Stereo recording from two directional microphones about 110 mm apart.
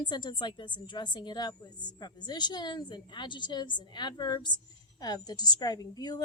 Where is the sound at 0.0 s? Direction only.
40° left (ahead or behind).